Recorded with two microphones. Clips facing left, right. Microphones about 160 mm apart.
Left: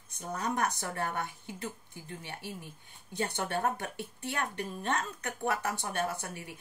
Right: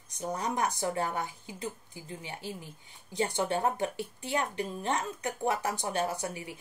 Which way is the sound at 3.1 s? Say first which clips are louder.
Right 3 dB; 15° right (ahead or behind).